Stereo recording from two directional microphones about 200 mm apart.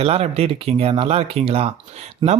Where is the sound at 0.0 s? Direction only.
30° right (ahead or behind).